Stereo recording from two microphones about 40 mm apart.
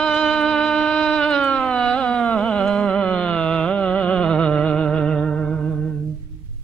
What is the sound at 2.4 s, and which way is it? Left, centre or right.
Music, left.